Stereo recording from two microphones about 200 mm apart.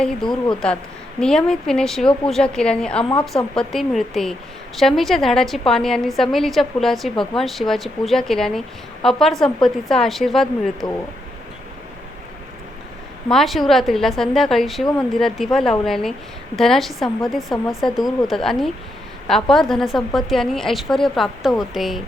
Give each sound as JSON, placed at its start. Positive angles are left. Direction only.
{"t": 0.0, "sound": "a woman's voice", "side_deg": 5}
{"t": 13.3, "sound": "a woman's voice", "side_deg": 0}